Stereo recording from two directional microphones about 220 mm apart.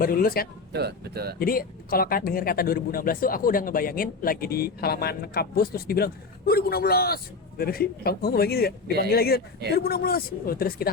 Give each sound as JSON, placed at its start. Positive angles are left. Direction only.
{"t": 0.0, "sound": "speech", "side_deg": 40}
{"t": 0.7, "sound": "speech", "side_deg": -50}
{"t": 1.4, "sound": "speech", "side_deg": 40}